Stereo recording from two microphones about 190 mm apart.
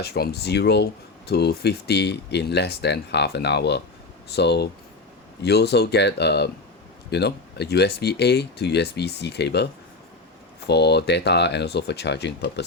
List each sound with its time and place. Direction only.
0.0 s speech: 60° left (ahead or behind)
10.7 s speech: 60° left (ahead or behind)